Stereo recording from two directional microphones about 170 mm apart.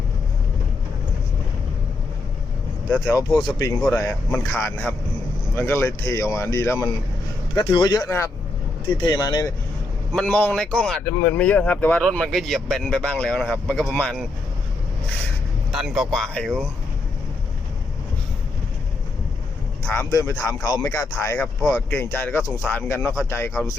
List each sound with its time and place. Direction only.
3.9 s speech: 15° left (ahead or behind)
10.1 s speech: centre (ahead or behind)
15.7 s speech: 5° right (ahead or behind)
19.9 s speech: 15° left (ahead or behind)